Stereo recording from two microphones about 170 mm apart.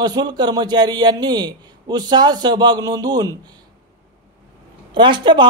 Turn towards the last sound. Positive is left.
turn(degrees=-25)  # may be behind; listen again after turning